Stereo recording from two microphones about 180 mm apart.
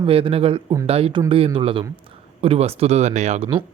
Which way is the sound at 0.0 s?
30° right (ahead or behind).